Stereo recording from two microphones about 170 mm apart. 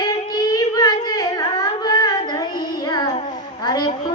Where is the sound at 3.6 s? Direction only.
25° left (ahead or behind).